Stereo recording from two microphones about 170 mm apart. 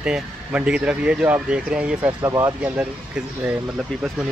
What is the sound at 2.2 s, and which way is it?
Speech, 15° right (ahead or behind).